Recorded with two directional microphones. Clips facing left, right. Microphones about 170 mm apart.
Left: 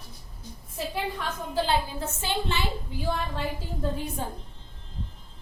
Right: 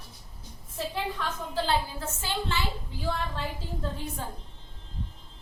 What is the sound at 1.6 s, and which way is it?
A woman's voice, 20° left (ahead or behind).